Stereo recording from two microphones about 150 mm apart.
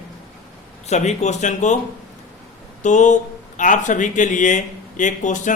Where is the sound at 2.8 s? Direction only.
55° left (ahead or behind).